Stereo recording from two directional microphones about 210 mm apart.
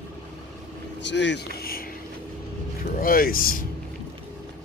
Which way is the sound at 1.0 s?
55° left (ahead or behind).